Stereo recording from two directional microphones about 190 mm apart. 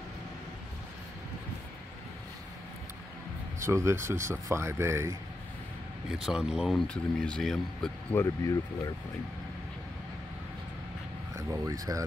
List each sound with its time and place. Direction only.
3.5 s speech: 15° right (ahead or behind)
6.1 s speech: 5° right (ahead or behind)
8.2 s speech: 20° left (ahead or behind)
11.3 s speech: 15° right (ahead or behind)